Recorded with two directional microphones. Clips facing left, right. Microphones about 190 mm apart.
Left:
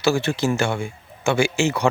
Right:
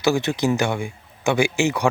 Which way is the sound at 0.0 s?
20° right (ahead or behind).